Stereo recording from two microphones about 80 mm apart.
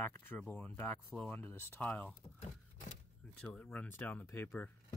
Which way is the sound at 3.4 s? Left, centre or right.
Left.